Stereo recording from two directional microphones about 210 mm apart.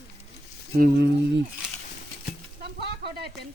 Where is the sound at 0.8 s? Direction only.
50° right (ahead or behind).